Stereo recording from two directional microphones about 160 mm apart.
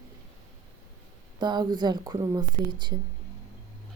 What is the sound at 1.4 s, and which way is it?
A woman's voice, 25° right (ahead or behind).